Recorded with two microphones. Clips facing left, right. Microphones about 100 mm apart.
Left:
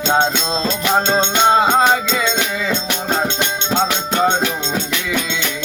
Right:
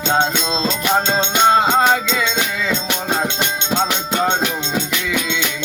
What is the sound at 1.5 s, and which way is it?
Music, 10° left (ahead or behind).